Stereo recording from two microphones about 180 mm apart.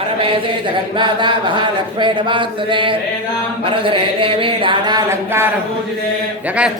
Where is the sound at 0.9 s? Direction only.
25° right (ahead or behind).